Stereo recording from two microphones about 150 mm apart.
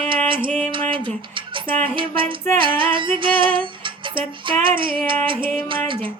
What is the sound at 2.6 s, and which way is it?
Music, 35° right (ahead or behind).